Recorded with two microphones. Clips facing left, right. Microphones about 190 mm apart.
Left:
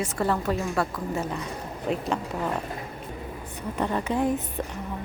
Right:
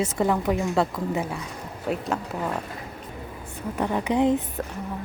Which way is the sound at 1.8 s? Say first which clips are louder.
Even; 5° right (ahead or behind).